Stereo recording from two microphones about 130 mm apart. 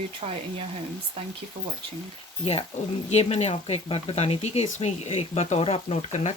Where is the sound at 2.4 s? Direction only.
45° left (ahead or behind).